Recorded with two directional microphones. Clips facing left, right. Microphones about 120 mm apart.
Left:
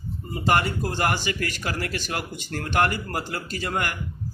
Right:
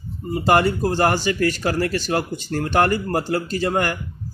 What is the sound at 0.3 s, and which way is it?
Speech, 30° right (ahead or behind).